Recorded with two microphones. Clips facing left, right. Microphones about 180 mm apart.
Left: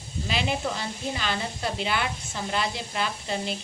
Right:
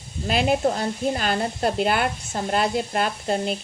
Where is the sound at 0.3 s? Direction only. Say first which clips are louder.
Right 8 dB; 50° right (ahead or behind).